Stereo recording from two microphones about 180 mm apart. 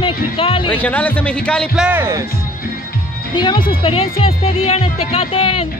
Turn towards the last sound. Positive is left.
turn(degrees=30)  # may be behind; listen again after turning